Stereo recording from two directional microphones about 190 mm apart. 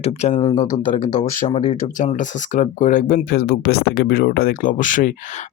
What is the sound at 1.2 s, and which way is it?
Speech, 35° left (ahead or behind).